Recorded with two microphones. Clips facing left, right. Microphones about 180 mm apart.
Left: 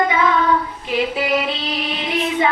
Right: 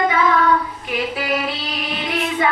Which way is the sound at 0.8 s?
25° left (ahead or behind).